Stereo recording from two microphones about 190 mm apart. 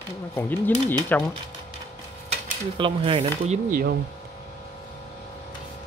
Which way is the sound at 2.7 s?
25° right (ahead or behind).